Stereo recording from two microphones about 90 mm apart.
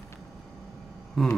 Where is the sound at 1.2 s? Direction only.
5° left (ahead or behind).